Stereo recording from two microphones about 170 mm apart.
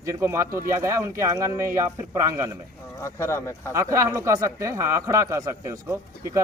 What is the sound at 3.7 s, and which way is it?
A man's voice, 20° right (ahead or behind).